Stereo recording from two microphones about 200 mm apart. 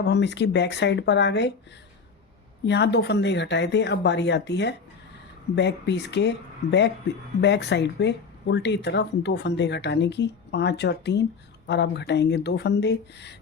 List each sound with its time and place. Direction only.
0.0 s speech: 60° left (ahead or behind)
2.6 s speech: 60° left (ahead or behind)